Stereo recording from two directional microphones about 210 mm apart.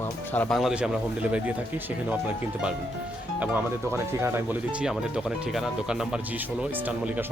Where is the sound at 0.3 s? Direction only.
Centre (ahead or behind).